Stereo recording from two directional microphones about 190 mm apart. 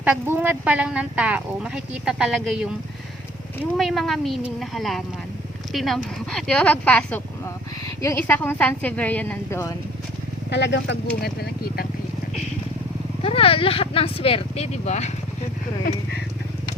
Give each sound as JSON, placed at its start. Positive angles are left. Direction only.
{"t": 0.0, "sound": "speech", "side_deg": -10}
{"t": 10.5, "sound": "speech", "side_deg": 65}
{"t": 11.2, "sound": "speech", "side_deg": 55}
{"t": 13.2, "sound": "speech", "side_deg": 30}